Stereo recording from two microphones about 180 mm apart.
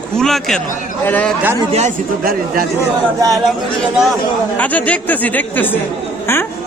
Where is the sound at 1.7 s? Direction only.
40° right (ahead or behind).